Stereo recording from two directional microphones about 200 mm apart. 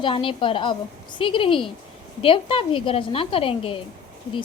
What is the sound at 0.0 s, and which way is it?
Speech, 25° left (ahead or behind).